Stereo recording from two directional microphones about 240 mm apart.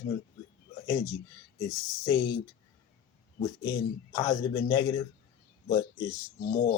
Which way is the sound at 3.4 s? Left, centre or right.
Centre.